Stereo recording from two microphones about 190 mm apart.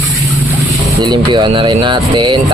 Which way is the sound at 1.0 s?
25° right (ahead or behind).